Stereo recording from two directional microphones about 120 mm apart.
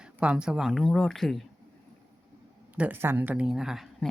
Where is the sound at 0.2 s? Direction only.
10° right (ahead or behind).